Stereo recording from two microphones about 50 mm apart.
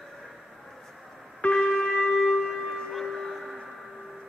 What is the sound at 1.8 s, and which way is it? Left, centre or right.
Shofar, centre.